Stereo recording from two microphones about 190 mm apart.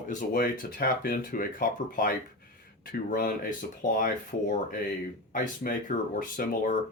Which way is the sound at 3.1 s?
50° left (ahead or behind).